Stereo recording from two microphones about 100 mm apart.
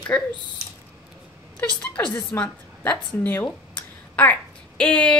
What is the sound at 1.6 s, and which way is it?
Speech, 15° left (ahead or behind).